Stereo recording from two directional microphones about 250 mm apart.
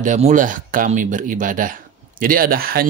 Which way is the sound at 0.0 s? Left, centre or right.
Right.